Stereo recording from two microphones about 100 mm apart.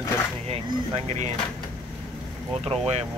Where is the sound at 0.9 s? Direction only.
90° right.